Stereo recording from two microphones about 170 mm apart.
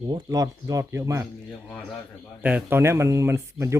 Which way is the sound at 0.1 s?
20° right (ahead or behind).